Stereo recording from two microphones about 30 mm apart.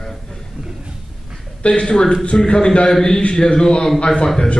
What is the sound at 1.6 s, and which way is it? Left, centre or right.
A man's voice, left.